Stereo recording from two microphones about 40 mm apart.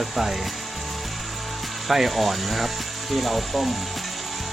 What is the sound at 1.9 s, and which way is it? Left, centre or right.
Speech, centre.